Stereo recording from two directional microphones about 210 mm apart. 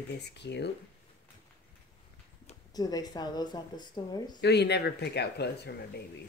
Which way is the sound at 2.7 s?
20° left (ahead or behind).